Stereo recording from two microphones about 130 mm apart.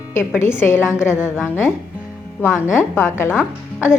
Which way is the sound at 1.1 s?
10° right (ahead or behind).